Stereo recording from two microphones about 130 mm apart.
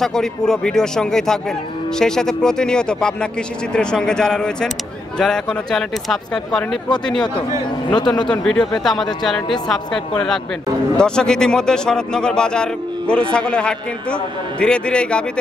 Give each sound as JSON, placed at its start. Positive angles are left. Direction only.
{"t": 0.0, "sound": "speech", "side_deg": 5}
{"t": 7.9, "sound": "speech", "side_deg": 35}
{"t": 8.3, "sound": "a man's voice", "side_deg": 5}